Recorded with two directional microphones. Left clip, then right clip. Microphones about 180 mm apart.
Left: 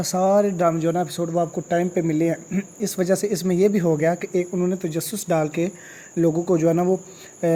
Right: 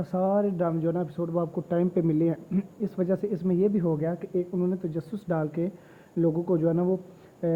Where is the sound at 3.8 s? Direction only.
35° left (ahead or behind); by 5.7 s 15° left (ahead or behind).